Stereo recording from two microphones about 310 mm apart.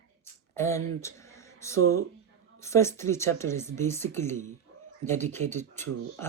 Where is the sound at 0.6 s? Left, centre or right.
Centre.